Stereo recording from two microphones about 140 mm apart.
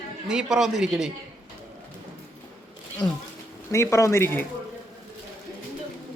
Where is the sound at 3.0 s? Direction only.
5° left (ahead or behind).